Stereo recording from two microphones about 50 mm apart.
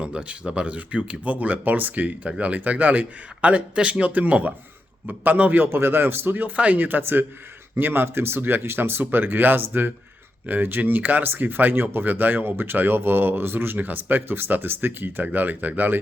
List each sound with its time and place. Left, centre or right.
0.0 s speech: right
5.6 s speech: right
6.7 s speech: right